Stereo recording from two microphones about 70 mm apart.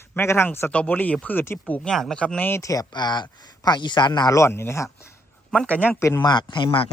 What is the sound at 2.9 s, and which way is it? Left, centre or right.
Speech, left.